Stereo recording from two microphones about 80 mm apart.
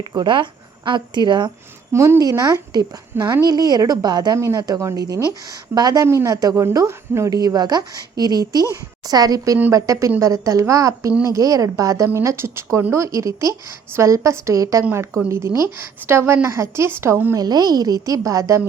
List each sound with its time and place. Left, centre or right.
0.0 s speech: right
1.9 s a woman's voice: right
2.4 s speech: right
4.4 s a woman's voice: right
6.1 s a woman's voice: right
12.0 s a woman's voice: right
17.3 s a woman's voice: right